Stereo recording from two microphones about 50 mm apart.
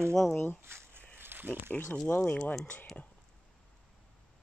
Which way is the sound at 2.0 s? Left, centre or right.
Left.